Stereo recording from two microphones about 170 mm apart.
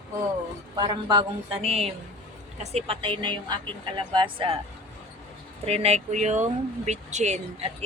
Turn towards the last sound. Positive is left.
turn(degrees=-40)  # may be behind; listen again after turning